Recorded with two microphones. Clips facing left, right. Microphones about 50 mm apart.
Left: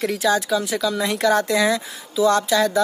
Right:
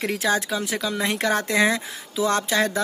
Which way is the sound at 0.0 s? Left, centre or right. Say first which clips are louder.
Left 3 dB; right.